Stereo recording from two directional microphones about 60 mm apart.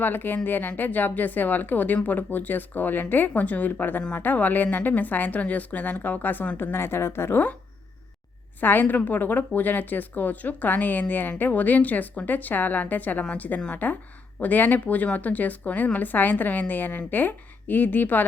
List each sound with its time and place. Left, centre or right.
0.0 s a woman's voice: left
8.6 s a woman's voice: left